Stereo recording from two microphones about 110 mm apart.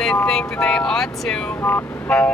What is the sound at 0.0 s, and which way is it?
Speech, 5° left (ahead or behind).